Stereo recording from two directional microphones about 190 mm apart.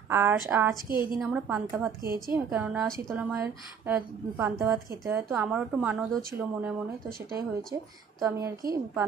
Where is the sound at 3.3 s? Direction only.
10° right (ahead or behind).